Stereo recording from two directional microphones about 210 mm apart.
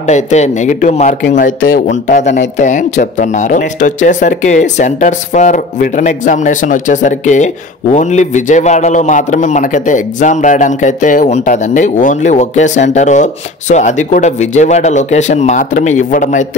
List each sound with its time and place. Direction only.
0.0 s speech: 35° left (ahead or behind)